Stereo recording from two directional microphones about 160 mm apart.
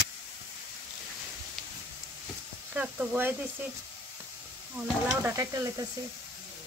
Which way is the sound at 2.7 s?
10° right (ahead or behind).